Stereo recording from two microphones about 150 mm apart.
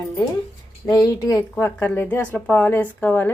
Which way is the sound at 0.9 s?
25° left (ahead or behind).